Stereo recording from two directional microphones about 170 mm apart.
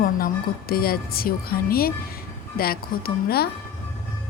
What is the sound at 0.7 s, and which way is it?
Speech, 60° left (ahead or behind).